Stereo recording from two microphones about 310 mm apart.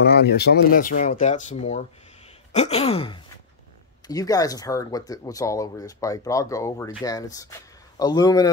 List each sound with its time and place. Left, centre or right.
0.0 s speech: left; by 8.5 s centre